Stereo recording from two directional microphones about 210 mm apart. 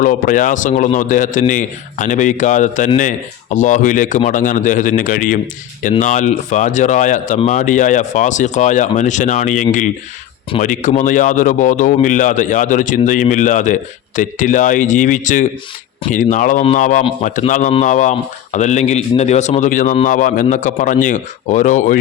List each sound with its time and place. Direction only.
0.0 s a man's voice: 40° left (ahead or behind)